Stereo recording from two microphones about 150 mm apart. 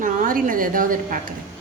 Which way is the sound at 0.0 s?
65° right (ahead or behind).